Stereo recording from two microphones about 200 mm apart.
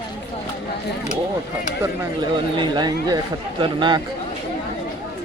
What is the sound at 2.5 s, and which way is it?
Speech, 20° right (ahead or behind).